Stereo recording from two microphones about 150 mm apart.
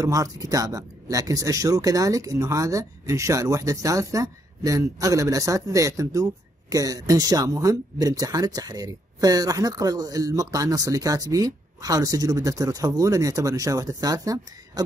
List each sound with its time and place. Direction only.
0.0 s speech: 20° right (ahead or behind)